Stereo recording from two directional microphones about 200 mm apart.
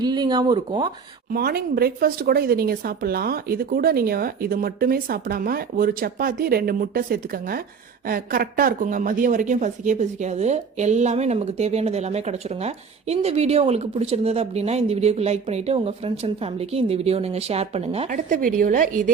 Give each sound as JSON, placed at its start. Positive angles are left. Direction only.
{"t": 0.0, "sound": "speech", "side_deg": -20}
{"t": 1.3, "sound": "speech", "side_deg": -50}